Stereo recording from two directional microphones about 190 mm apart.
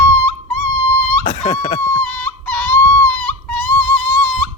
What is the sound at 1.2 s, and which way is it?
Speech, 35° left (ahead or behind).